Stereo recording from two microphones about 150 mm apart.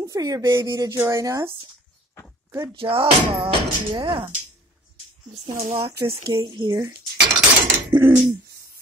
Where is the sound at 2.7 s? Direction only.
35° right (ahead or behind).